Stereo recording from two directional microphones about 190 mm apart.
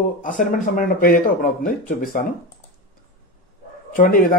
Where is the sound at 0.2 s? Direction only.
45° left (ahead or behind).